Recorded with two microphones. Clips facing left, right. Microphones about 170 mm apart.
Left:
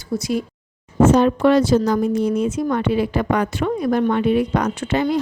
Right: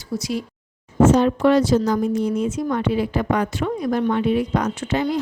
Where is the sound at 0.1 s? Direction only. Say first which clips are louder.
Left 3 dB; 55° left (ahead or behind).